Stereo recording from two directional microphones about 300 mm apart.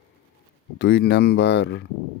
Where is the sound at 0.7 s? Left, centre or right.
Left.